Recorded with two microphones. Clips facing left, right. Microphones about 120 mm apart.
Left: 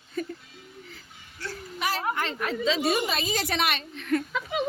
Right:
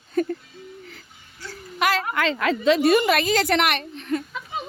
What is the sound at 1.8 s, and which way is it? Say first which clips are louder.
A woman's voice: right 6 dB; 90° right.